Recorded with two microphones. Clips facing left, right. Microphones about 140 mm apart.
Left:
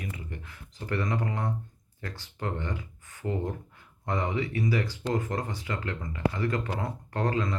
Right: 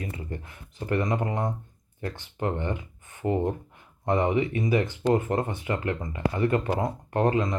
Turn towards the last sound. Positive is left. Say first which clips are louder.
# right 5 dB
turn(degrees=-20)  # may be behind; listen again after turning